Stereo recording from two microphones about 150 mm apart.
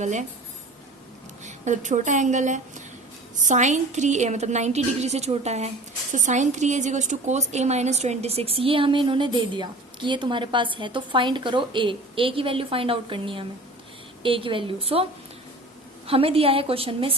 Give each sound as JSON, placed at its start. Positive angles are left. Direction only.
{"t": 0.0, "sound": "speech", "side_deg": -50}
{"t": 1.5, "sound": "a woman's voice", "side_deg": -55}
{"t": 16.0, "sound": "a woman's voice", "side_deg": -40}